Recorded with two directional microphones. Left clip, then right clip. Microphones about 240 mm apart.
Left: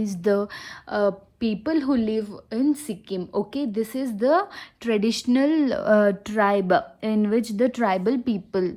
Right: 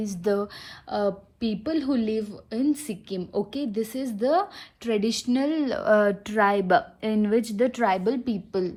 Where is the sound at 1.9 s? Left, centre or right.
Centre.